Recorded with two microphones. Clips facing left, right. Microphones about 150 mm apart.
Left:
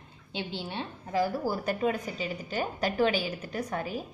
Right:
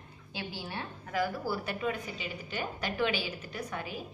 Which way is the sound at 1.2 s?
40° left (ahead or behind).